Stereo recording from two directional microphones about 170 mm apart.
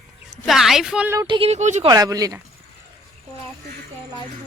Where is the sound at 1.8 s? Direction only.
20° right (ahead or behind).